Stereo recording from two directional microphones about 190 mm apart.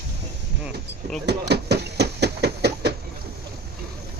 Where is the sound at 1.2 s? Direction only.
60° right (ahead or behind).